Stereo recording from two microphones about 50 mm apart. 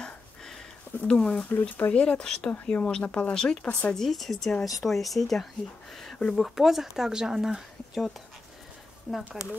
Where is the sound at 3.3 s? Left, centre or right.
Centre.